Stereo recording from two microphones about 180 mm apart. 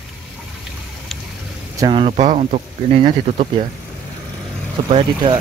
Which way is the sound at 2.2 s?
40° right (ahead or behind).